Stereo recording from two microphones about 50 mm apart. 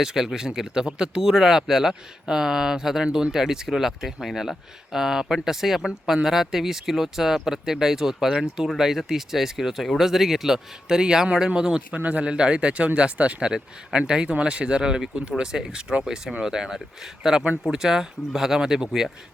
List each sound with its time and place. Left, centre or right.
0.0 s speech: centre
11.9 s speech: right; by 19.0 s centre